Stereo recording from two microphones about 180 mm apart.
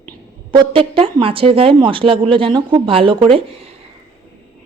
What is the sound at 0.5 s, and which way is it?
A woman's voice, 30° right (ahead or behind).